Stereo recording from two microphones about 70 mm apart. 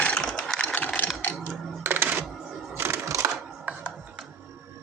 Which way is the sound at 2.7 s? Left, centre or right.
Right.